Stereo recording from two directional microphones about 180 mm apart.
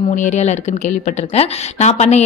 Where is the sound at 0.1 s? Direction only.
40° left (ahead or behind).